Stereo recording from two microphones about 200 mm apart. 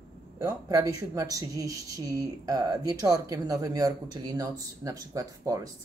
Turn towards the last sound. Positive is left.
turn(degrees=-15)  # may be behind; listen again after turning